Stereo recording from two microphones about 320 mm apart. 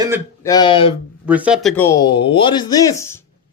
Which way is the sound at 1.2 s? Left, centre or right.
Centre.